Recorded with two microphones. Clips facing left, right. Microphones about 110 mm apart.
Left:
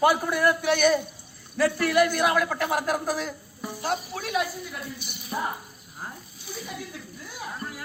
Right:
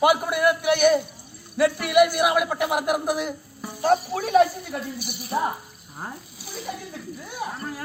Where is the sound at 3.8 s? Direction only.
40° right (ahead or behind).